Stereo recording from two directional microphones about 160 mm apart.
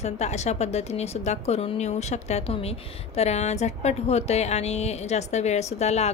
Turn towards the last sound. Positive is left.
turn(degrees=45)  # may be behind; listen again after turning